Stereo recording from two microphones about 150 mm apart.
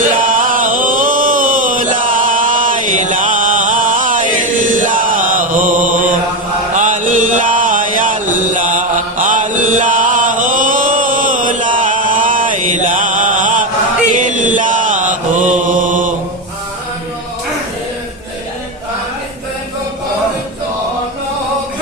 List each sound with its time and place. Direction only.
0.1 s a sound: 65° right (ahead or behind)
6.7 s mantra: 60° right (ahead or behind)
9.1 s chant: 60° right (ahead or behind)